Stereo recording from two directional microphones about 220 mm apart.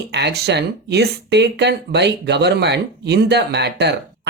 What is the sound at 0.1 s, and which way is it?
Speech, 50° right (ahead or behind).